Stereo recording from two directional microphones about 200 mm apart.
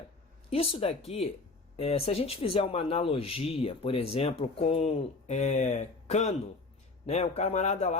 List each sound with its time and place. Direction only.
0.5 s speech: 30° left (ahead or behind)